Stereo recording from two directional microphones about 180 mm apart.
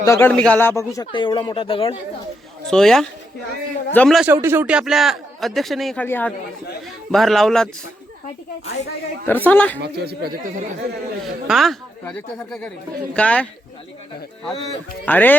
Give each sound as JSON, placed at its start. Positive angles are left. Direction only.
{"t": 0.0, "sound": "speech", "side_deg": 15}
{"t": 2.6, "sound": "a man's voice", "side_deg": 5}
{"t": 4.2, "sound": "a man's voice", "side_deg": -10}
{"t": 9.2, "sound": "a man's voice", "side_deg": 10}
{"t": 9.7, "sound": "speech", "side_deg": -65}
{"t": 11.4, "sound": "a man's voice", "side_deg": 0}
{"t": 15.0, "sound": "a man's voice", "side_deg": 10}